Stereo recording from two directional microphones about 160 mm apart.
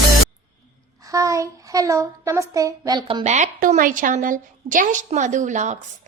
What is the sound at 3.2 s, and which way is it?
A woman's voice, 45° right (ahead or behind).